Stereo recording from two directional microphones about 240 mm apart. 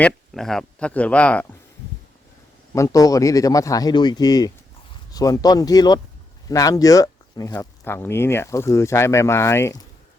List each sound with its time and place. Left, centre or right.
0.0 s speech: centre
2.7 s speech: centre